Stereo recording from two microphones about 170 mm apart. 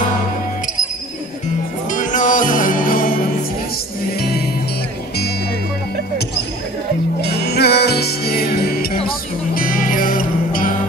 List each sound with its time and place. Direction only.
1.9 s music: 50° left (ahead or behind)
7.2 s music: 75° left (ahead or behind); by 10.7 s 55° left (ahead or behind)